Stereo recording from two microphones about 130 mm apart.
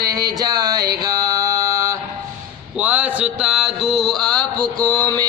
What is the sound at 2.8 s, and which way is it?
Mantra, 10° right (ahead or behind).